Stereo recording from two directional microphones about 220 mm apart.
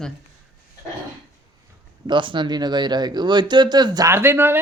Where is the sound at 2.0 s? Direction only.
20° right (ahead or behind).